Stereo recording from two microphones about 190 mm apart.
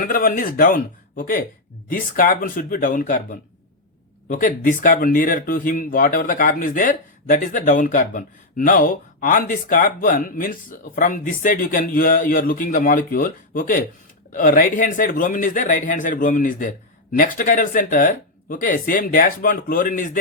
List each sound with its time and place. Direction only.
0.0 s speech: 45° left (ahead or behind)